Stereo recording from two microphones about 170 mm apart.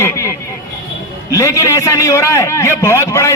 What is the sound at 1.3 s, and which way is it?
A man's voice, 20° left (ahead or behind).